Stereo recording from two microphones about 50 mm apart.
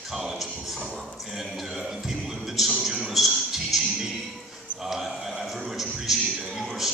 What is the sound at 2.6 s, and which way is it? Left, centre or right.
Speech, centre.